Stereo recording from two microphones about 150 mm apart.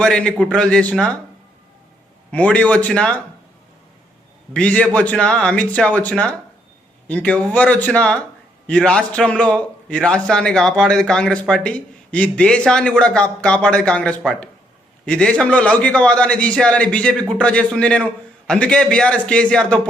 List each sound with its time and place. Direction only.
0.0 s a man's voice: 5° left (ahead or behind)
2.3 s a man's voice: 10° left (ahead or behind)
4.5 s a man's voice: 10° left (ahead or behind)